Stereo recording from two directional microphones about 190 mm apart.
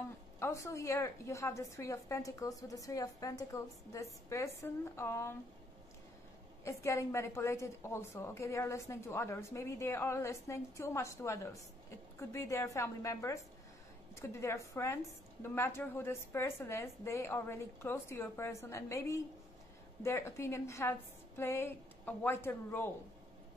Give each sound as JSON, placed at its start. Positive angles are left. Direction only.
{"t": 0.4, "sound": "a woman's voice", "side_deg": 15}
{"t": 6.6, "sound": "a woman's voice", "side_deg": 15}